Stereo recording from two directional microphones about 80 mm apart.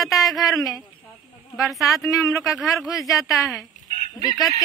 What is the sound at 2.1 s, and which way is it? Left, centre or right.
Speech, left.